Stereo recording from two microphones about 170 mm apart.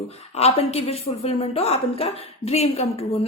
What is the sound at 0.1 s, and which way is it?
A woman's voice, 35° left (ahead or behind).